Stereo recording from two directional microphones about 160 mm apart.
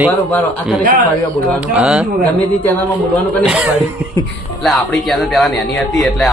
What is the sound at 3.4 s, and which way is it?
A man's voice, 5° right (ahead or behind).